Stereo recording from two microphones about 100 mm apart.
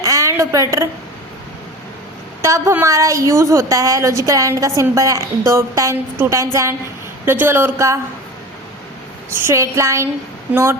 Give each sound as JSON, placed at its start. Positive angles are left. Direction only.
{"t": 0.0, "sound": "a sound", "side_deg": -35}
{"t": 2.4, "sound": "a woman's voice", "side_deg": -30}
{"t": 9.3, "sound": "speech", "side_deg": -30}